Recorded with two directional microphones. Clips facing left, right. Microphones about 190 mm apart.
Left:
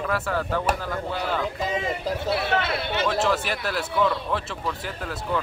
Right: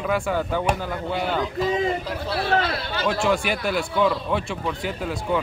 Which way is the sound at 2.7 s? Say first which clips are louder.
Left 1 dB; 25° left (ahead or behind).